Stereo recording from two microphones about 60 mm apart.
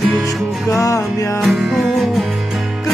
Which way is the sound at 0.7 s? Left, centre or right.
Left.